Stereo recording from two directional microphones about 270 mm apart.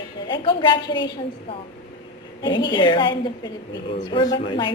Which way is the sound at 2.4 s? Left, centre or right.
Centre.